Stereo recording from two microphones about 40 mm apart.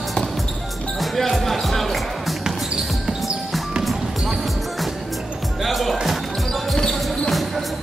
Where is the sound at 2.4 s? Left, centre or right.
Centre.